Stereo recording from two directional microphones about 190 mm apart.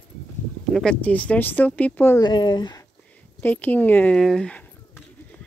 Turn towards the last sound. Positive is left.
turn(degrees=5)  # may be behind; listen again after turning